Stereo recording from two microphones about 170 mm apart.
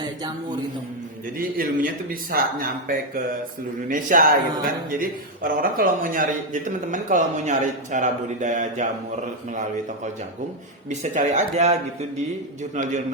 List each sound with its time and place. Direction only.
1.4 s a man's voice: 55° right (ahead or behind)
11.0 s a man's voice: 45° right (ahead or behind)